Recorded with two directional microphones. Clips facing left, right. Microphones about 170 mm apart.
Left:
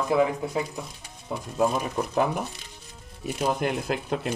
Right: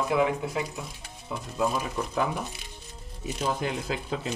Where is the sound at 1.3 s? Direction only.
45° left (ahead or behind).